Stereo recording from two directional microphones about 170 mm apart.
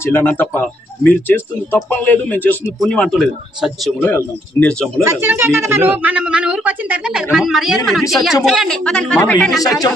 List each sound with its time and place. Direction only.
0.0 s speech: 10° left (ahead or behind)
5.0 s speech: 15° right (ahead or behind); by 9.6 s 5° left (ahead or behind)
9.6 s speech: 20° left (ahead or behind)